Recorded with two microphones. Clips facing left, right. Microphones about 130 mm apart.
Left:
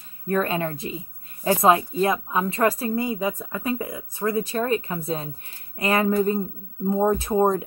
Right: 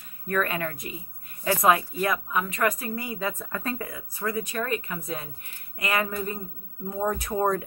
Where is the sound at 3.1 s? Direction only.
15° left (ahead or behind).